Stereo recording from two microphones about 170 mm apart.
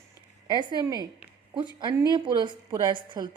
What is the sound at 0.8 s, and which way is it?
Speech, 20° right (ahead or behind).